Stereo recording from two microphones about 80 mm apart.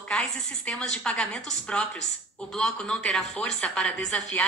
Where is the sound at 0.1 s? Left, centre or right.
Centre.